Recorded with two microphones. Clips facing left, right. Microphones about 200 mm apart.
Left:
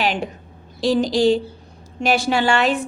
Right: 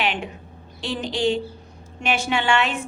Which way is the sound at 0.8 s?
40° left (ahead or behind).